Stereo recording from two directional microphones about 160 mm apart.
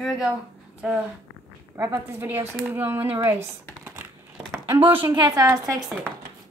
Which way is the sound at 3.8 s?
10° right (ahead or behind).